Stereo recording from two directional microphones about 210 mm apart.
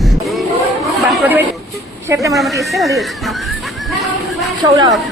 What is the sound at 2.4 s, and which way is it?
Speech, centre (ahead or behind).